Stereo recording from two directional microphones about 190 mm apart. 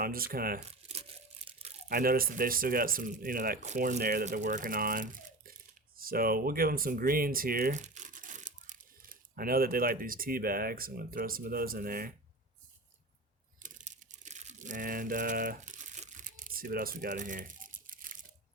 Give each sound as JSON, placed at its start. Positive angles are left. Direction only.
{"t": 0.0, "sound": "speech", "side_deg": -50}
{"t": 1.5, "sound": "crumpling", "side_deg": -30}
{"t": 1.9, "sound": "speech", "side_deg": -50}
{"t": 13.6, "sound": "a sound", "side_deg": -40}